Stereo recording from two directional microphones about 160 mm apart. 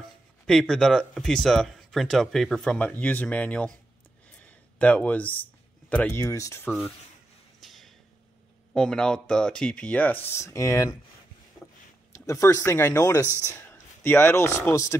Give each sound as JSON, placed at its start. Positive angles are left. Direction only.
{"t": 0.5, "sound": "speech", "side_deg": 0}
{"t": 4.4, "sound": "a sound", "side_deg": 5}
{"t": 6.2, "sound": "speech", "side_deg": 20}
{"t": 7.6, "sound": "a sound", "side_deg": 0}
{"t": 8.7, "sound": "speech", "side_deg": 5}
{"t": 12.1, "sound": "speech", "side_deg": 20}